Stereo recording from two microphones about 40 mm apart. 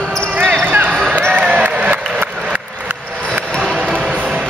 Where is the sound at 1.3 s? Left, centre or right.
Right.